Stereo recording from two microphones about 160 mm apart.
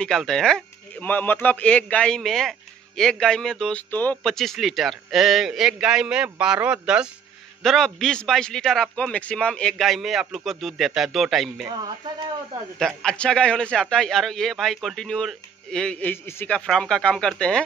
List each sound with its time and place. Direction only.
0.0 s a man's voice: 5° left (ahead or behind)
11.6 s speech: 30° right (ahead or behind)
12.7 s a man's voice: centre (ahead or behind)